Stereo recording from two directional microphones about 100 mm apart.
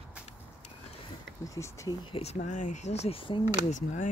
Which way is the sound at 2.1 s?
90° left.